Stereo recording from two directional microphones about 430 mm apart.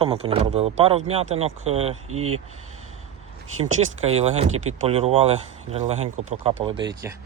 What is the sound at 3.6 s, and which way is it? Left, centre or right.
Speech, centre.